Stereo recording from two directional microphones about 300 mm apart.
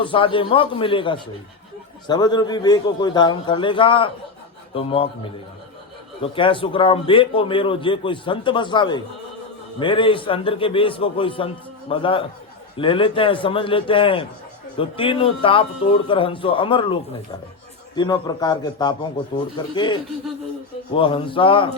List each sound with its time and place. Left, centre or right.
0.0 s a man's voice: centre
6.2 s a man's voice: centre